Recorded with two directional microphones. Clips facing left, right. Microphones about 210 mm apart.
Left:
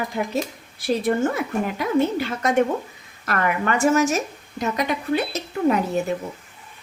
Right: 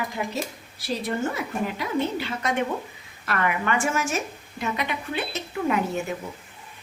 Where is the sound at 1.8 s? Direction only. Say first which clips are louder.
Left 8 dB; 50° left (ahead or behind).